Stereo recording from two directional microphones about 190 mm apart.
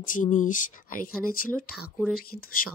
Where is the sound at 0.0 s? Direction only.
45° left (ahead or behind).